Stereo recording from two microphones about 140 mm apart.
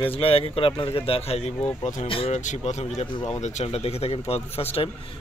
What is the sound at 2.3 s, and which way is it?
Speech, 55° left (ahead or behind).